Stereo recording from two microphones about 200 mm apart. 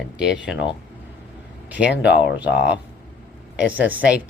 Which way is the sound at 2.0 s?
60° left (ahead or behind).